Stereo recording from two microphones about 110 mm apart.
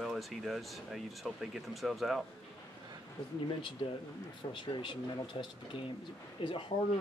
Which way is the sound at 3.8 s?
50° left (ahead or behind).